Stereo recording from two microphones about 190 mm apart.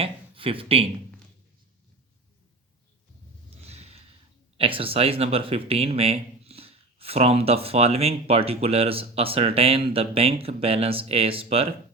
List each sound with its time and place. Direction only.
0.0 s speech: 30° right (ahead or behind)
3.6 s a sound: 35° right (ahead or behind)
4.5 s speech: 30° right (ahead or behind)